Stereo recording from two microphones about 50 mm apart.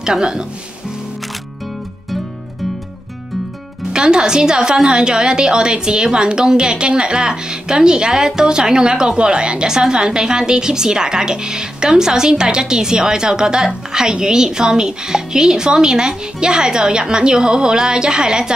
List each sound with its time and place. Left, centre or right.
0.0 s a woman's voice: centre
3.9 s a woman's voice: centre